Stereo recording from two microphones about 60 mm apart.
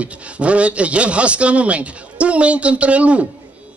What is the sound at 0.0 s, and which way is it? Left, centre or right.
A man's voice, right.